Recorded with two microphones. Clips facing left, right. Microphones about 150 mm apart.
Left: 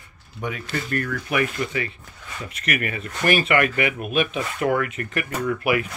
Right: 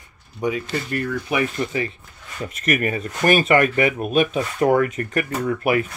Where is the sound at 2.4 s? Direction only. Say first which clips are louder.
Right 5 dB; 40° right (ahead or behind).